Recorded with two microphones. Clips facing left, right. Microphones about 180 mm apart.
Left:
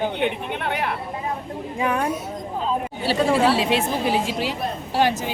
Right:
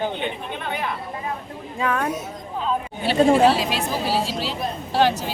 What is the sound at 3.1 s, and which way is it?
Speech, 30° right (ahead or behind).